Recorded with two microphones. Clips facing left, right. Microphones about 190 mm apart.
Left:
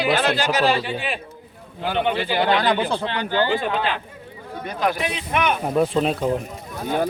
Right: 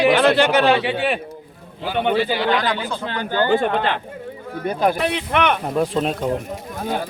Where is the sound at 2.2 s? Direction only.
50° left (ahead or behind).